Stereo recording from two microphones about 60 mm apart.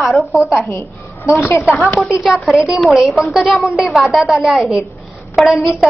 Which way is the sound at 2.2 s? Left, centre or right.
Centre.